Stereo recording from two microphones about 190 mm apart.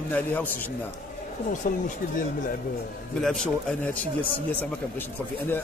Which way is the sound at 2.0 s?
50° left (ahead or behind).